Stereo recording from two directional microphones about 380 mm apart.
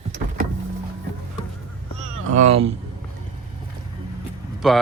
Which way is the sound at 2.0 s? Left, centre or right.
Right.